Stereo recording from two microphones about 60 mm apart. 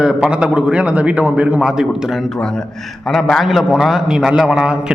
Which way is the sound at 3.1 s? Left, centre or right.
Centre.